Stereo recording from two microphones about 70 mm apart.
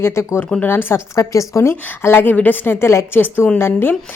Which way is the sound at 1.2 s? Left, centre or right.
Left.